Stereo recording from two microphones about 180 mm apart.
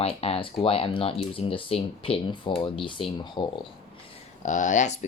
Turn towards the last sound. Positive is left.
turn(degrees=40)  # may be behind; listen again after turning